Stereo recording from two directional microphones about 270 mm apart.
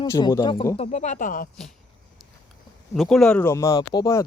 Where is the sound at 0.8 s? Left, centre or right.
Left.